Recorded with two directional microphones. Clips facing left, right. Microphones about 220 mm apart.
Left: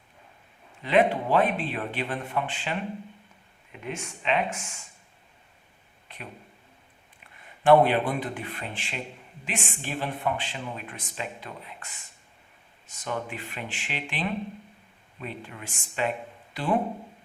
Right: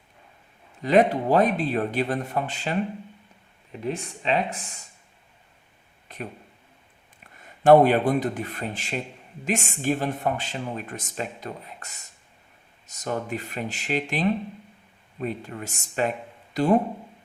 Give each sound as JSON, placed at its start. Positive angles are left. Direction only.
{"t": 0.8, "sound": "speech", "side_deg": -40}
{"t": 6.1, "sound": "a sound", "side_deg": -45}
{"t": 7.6, "sound": "speech", "side_deg": -45}